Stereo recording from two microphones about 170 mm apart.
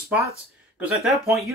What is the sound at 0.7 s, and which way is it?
Speech, 5° right (ahead or behind).